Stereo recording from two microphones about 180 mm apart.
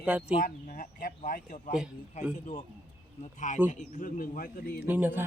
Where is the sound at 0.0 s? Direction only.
5° right (ahead or behind).